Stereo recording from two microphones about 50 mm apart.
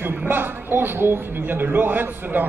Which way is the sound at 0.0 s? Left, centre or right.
Right.